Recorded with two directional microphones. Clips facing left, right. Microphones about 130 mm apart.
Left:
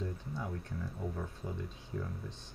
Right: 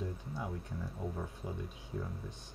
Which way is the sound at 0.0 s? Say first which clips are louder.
Left 1 dB; 15° right (ahead or behind).